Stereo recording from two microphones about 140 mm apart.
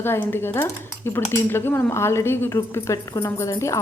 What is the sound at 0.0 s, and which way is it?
Speech, 15° left (ahead or behind).